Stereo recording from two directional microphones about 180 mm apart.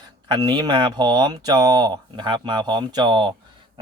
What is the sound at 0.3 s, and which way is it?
Speech, 25° right (ahead or behind).